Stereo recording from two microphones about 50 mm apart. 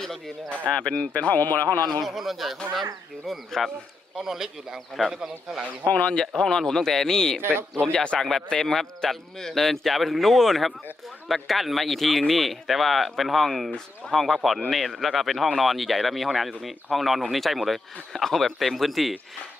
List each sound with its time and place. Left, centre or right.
0.5 s speech: centre
1.1 s speech: left
2.0 s speech: centre
4.1 s a man's voice: centre
5.9 s speech: left
6.1 s speech: centre
8.0 s speech: centre
8.3 s speech: centre